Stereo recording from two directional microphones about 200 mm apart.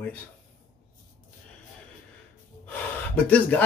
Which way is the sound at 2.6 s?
5° left (ahead or behind).